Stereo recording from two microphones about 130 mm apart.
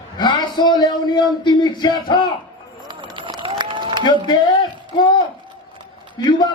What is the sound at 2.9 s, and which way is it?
Run, 40° right (ahead or behind).